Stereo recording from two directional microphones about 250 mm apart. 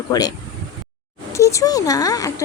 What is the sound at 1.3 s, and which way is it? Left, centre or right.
A woman's voice, centre.